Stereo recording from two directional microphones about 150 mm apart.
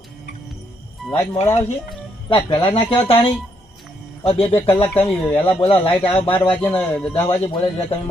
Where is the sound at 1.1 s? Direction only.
20° left (ahead or behind).